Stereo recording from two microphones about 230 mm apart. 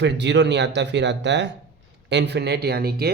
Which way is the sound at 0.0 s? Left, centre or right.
Right.